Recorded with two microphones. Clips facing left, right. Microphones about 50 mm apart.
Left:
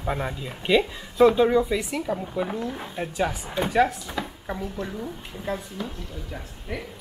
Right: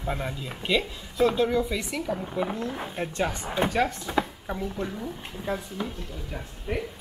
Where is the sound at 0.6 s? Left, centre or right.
Centre.